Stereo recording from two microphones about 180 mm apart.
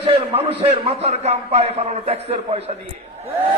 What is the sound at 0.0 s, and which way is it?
A man's voice, 35° right (ahead or behind).